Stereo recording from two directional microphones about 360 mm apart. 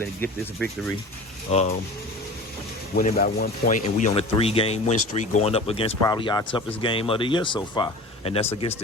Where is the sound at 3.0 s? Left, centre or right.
Left.